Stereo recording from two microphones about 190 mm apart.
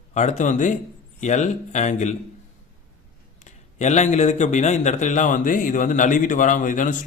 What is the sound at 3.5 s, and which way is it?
A man's voice, 40° left (ahead or behind).